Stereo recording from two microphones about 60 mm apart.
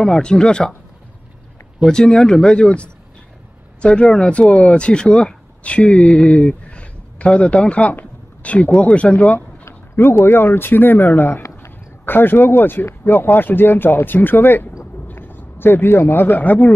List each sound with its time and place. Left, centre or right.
0.0 s speech: centre
1.9 s speech: centre
9.7 s a man's voice: left